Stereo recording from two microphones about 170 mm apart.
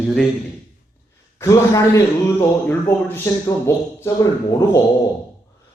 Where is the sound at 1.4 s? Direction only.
20° left (ahead or behind).